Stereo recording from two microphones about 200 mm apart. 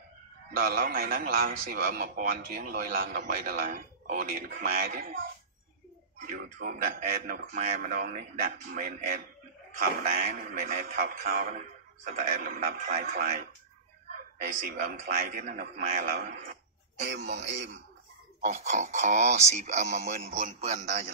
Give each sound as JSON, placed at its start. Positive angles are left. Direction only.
{"t": 0.5, "sound": "a man's voice", "side_deg": -50}
{"t": 14.5, "sound": "a man's voice", "side_deg": -45}
{"t": 18.4, "sound": "speech", "side_deg": -35}